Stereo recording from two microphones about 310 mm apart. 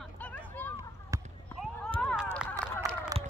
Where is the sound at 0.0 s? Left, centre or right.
Centre.